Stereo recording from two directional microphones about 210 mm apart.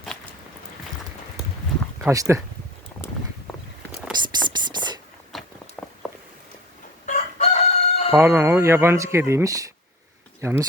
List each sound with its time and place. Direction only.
2.0 s speech: 15° right (ahead or behind)
3.5 s walk: centre (ahead or behind)
4.2 s whispering: 20° right (ahead or behind)
5.3 s a sound: centre (ahead or behind)
7.0 s chicken: 35° left (ahead or behind)
8.1 s speech: 10° right (ahead or behind)